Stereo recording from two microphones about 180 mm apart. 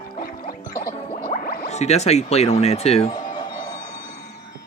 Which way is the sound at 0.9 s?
35° left (ahead or behind).